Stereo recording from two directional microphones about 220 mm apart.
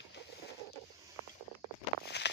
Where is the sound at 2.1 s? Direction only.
50° left (ahead or behind).